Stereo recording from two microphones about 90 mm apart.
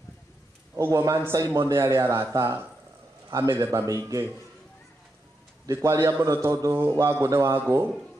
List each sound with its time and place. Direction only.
0.7 s a man's voice: 35° right (ahead or behind)
3.8 s a man's voice: 40° right (ahead or behind)
5.7 s a man's voice: 35° right (ahead or behind)